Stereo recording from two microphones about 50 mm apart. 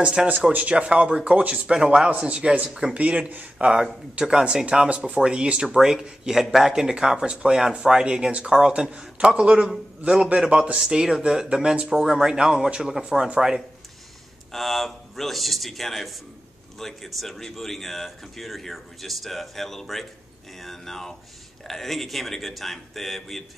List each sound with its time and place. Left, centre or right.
0.5 s speech: right
4.8 s speech: right
14.5 s a man's voice: centre